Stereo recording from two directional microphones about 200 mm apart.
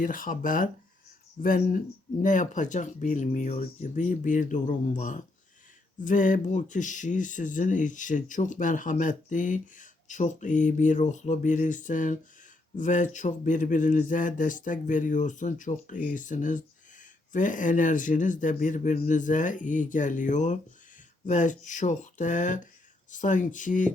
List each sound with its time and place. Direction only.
0.0 s speech: 45° left (ahead or behind)